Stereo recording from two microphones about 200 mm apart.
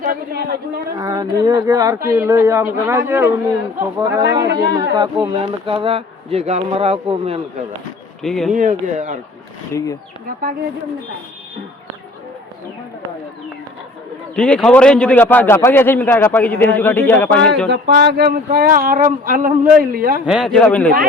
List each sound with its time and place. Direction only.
0.0 s a man's voice: 50° right (ahead or behind)
0.9 s speech: 20° right (ahead or behind)
8.2 s speech: centre (ahead or behind)
8.5 s speech: 40° right (ahead or behind)
9.7 s a man's voice: 15° left (ahead or behind)
14.3 s a man's voice: 5° left (ahead or behind)
17.7 s speech: 55° right (ahead or behind)
20.2 s speech: 5° right (ahead or behind)